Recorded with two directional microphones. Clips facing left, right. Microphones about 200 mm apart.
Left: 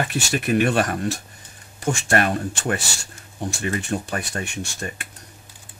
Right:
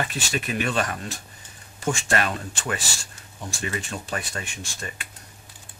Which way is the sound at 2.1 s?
50° left (ahead or behind).